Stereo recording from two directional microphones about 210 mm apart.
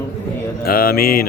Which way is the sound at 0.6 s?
45° left (ahead or behind).